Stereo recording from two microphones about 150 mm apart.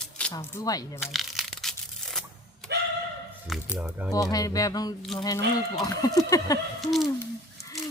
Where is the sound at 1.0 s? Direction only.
Centre (ahead or behind).